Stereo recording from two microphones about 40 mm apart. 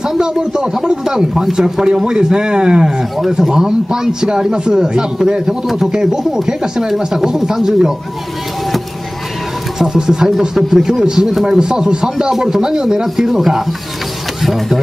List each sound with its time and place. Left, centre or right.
0.2 s speech: right
9.8 s speech: centre